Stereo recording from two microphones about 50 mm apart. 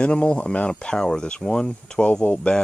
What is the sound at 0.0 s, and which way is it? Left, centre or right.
Speech, left.